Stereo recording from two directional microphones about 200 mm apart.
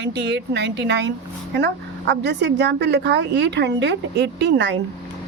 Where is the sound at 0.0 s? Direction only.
55° right (ahead or behind).